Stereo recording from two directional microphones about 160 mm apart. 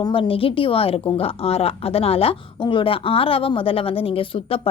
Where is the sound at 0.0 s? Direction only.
35° left (ahead or behind).